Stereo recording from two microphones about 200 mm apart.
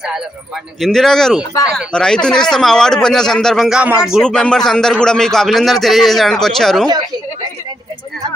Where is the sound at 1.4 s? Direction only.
15° left (ahead or behind).